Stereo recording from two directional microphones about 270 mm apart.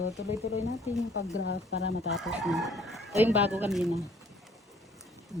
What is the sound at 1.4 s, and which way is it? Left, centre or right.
Speech, left.